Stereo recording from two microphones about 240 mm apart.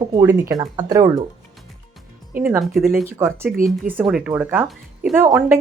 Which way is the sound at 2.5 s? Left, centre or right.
Centre.